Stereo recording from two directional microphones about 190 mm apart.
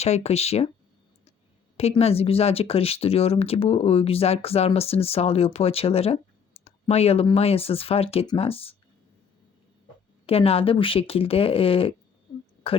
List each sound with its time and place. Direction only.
0.0 s speech: 35° left (ahead or behind)
1.7 s speech: 30° left (ahead or behind)
10.2 s speech: 30° left (ahead or behind)